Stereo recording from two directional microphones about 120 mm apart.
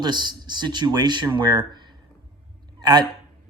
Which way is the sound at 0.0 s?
40° right (ahead or behind).